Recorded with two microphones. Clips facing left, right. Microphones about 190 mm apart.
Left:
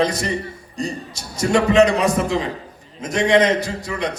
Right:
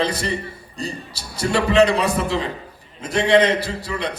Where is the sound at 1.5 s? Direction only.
30° right (ahead or behind).